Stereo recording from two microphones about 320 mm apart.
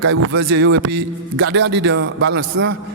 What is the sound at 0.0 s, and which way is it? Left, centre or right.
A man's voice, right.